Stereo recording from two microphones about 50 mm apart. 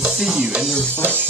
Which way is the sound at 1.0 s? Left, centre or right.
Right.